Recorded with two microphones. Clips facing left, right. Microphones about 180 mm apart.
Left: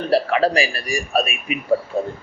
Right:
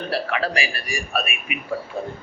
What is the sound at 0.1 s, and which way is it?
A man's voice, 35° left (ahead or behind).